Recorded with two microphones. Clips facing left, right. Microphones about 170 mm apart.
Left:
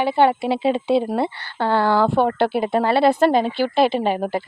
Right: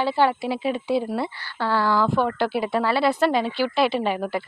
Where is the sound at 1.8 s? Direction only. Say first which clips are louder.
Left 4 dB; 65° left (ahead or behind).